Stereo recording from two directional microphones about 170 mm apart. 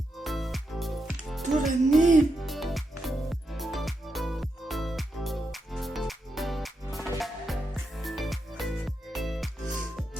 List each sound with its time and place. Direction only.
0.2 s music: centre (ahead or behind)
2.0 s music: 50° right (ahead or behind)
2.4 s music: centre (ahead or behind)